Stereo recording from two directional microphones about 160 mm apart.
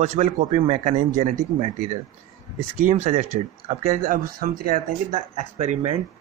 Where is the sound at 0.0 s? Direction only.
45° right (ahead or behind).